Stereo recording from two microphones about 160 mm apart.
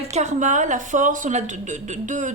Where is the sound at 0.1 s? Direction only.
45° right (ahead or behind).